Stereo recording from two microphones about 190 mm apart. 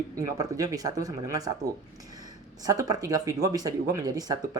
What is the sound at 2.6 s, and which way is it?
Speech, 20° right (ahead or behind).